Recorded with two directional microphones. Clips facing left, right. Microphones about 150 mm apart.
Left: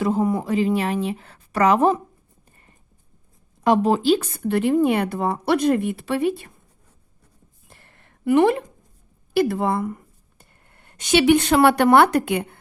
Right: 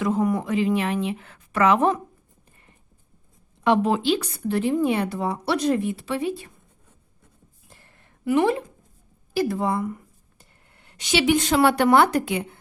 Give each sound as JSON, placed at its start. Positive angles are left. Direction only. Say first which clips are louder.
{"t": 0.0, "sound": "speech", "louder": "left 2 dB", "side_deg": 30}
{"t": 0.5, "sound": "speech", "louder": "left 2 dB", "side_deg": 35}
{"t": 3.6, "sound": "speech", "louder": "left 2 dB", "side_deg": 40}
{"t": 7.7, "sound": "a sound", "louder": "left 2 dB", "side_deg": 65}
{"t": 9.3, "sound": "speech", "louder": "left 3 dB", "side_deg": 65}